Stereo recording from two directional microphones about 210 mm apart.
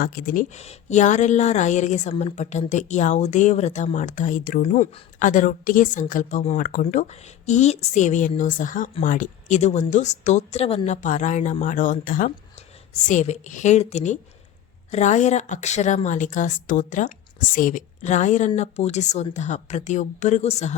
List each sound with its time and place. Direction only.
0.0 s a woman's voice: 40° left (ahead or behind)